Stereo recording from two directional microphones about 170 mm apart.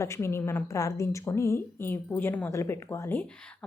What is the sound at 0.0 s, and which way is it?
Speech, 15° left (ahead or behind).